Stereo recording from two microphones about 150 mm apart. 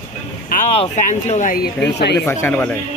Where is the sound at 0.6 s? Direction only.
50° left (ahead or behind).